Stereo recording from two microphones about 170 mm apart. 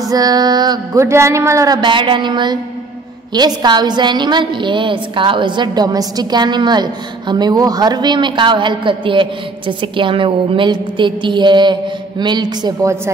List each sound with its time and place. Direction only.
0.1 s a woman's voice: 20° right (ahead or behind)